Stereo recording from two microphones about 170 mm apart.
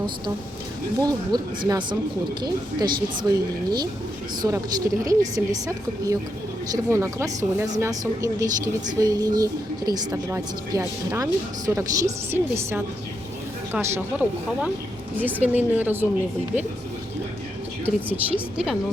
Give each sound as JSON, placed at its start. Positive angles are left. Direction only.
{"t": 1.0, "sound": "a woman's voice", "side_deg": -20}
{"t": 17.8, "sound": "speech", "side_deg": -10}